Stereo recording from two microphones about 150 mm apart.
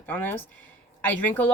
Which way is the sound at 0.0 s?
10° left (ahead or behind).